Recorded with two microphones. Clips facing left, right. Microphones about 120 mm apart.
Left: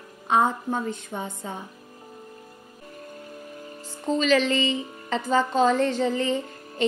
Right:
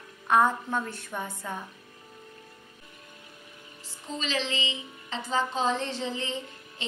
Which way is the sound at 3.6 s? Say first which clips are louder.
Left 14 dB; 45° left (ahead or behind).